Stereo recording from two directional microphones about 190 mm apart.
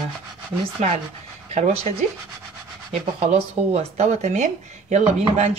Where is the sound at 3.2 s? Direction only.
35° right (ahead or behind).